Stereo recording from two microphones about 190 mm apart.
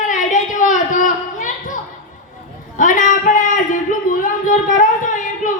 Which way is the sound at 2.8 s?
45° left (ahead or behind).